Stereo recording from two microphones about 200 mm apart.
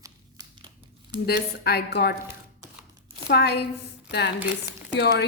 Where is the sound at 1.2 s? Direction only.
55° left (ahead or behind).